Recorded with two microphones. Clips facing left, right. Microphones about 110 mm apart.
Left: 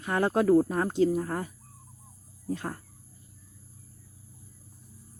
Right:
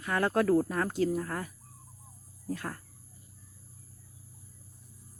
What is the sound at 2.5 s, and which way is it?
Speech, 25° left (ahead or behind).